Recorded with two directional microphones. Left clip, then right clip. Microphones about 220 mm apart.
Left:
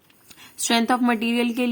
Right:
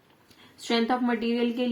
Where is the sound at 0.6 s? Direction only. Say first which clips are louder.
Left 5 dB; 35° left (ahead or behind).